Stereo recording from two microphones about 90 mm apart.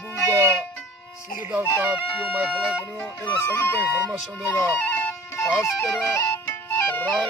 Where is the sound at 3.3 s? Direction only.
25° left (ahead or behind).